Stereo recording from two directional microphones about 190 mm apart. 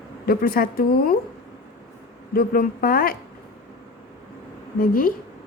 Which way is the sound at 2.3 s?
50° left (ahead or behind).